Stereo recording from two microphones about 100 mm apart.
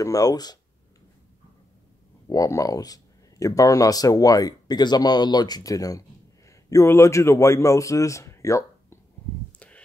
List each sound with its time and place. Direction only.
0.0 s speech: 35° left (ahead or behind)
2.2 s a man's voice: 35° left (ahead or behind)